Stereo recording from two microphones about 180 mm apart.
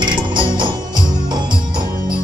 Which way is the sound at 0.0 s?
25° right (ahead or behind).